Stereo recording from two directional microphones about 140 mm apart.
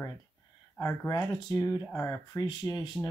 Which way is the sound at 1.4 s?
25° left (ahead or behind).